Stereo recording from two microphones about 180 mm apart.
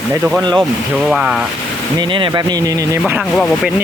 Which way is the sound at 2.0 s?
30° right (ahead or behind).